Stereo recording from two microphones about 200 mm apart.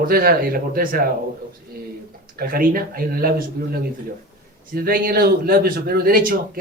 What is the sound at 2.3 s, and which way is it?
Speech, 45° right (ahead or behind).